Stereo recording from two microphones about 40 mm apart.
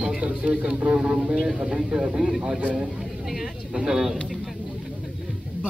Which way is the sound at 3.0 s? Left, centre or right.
Centre.